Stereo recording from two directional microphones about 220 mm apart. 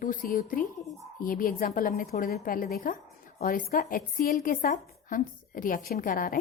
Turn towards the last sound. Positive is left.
turn(degrees=40)  # may be behind; listen again after turning